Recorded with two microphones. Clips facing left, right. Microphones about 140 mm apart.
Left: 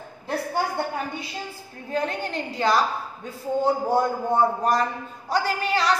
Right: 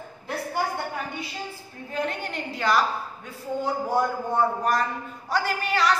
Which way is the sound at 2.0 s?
35° left (ahead or behind).